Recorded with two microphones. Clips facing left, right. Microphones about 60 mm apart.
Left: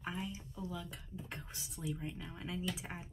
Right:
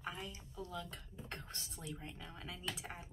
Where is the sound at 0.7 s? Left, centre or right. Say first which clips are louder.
Left 1 dB; centre.